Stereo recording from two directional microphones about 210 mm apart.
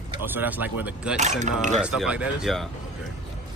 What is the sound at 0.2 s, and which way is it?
Speech, 10° right (ahead or behind).